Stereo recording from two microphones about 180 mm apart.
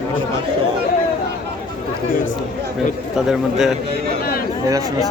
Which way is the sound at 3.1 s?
Centre (ahead or behind).